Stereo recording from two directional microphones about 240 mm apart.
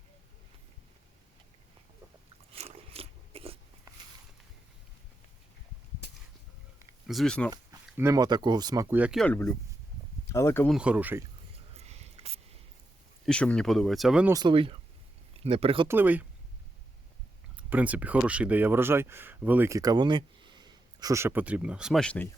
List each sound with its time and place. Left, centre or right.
2.5 s a sound: right
7.1 s speech: centre
7.5 s speech: centre
10.8 s speech: centre
11.8 s a sound: right
13.2 s speech: centre
14.3 s speech: right
15.9 s speech: centre
17.6 s speech: centre